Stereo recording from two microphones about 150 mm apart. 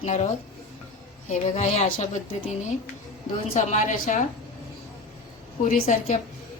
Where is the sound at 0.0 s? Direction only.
45° left (ahead or behind).